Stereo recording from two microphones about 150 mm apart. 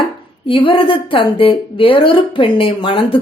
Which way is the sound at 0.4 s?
35° left (ahead or behind).